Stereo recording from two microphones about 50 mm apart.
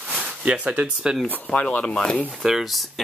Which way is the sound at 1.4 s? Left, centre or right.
Left.